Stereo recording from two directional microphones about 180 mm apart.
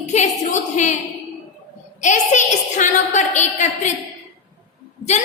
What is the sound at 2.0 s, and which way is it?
A woman's voice, 40° left (ahead or behind).